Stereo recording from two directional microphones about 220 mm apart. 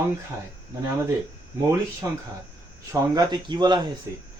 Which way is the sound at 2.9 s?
20° right (ahead or behind).